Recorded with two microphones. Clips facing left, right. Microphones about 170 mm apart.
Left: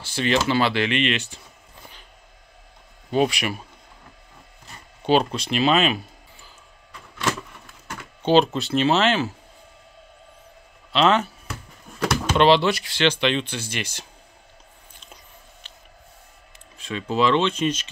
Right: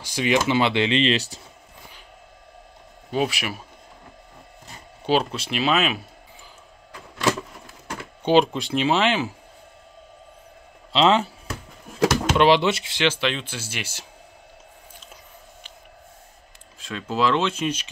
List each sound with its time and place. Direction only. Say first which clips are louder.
0.0 s a sound: right 1 dB; 15° right (ahead or behind)
0.5 s speech: right 1 dB; 20° right (ahead or behind); by 1.4 s 35° right (ahead or behind)
3.1 s speech: left 3 dB; 5° right (ahead or behind)
5.0 s speech: left 2 dB; 5° right (ahead or behind)
8.2 s speech: even; 10° right (ahead or behind)
10.9 s speech: right 1 dB; 25° right (ahead or behind)
12.4 s speech: left 1 dB; 15° right (ahead or behind)
13.0 s speech: left 2 dB; 5° right (ahead or behind)
16.7 s speech: left 2 dB; centre (ahead or behind)